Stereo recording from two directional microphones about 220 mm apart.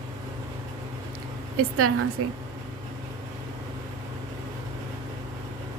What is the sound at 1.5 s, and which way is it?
Speech, 80° right.